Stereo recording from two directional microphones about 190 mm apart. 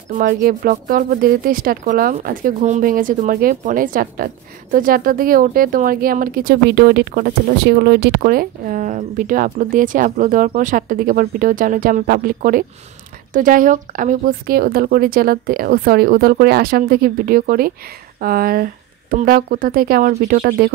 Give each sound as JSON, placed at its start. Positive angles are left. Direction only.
{"t": 0.1, "sound": "speech", "side_deg": -45}